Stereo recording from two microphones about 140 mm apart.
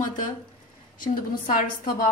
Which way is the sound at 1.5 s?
90° left.